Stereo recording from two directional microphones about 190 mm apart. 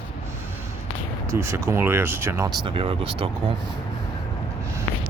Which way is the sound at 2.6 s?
30° right (ahead or behind).